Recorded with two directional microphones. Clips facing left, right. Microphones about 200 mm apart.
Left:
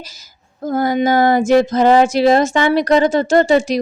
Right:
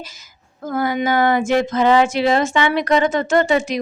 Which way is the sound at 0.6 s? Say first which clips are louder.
Left 4 dB; 40° left (ahead or behind).